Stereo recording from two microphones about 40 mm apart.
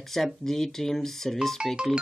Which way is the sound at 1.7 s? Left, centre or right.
Right.